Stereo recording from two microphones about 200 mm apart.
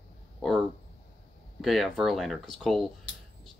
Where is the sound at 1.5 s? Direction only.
Centre (ahead or behind).